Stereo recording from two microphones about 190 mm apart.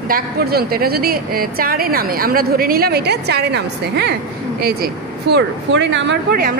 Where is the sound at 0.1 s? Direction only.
55° right (ahead or behind).